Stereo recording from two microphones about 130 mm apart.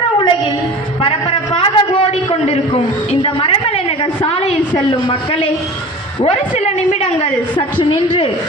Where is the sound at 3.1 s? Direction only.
40° left (ahead or behind).